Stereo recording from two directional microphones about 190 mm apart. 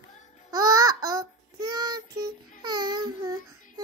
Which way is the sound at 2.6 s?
20° right (ahead or behind).